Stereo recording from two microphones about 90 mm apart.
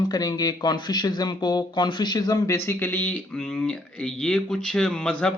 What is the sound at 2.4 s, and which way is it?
Speech, 35° left (ahead or behind).